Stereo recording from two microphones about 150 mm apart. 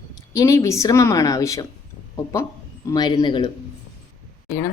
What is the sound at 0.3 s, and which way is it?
A woman's voice, 20° left (ahead or behind).